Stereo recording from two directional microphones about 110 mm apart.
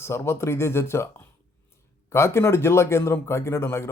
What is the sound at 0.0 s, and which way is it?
A man's voice, 25° left (ahead or behind).